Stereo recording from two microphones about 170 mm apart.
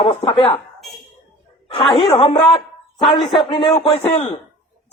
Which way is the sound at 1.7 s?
35° left (ahead or behind).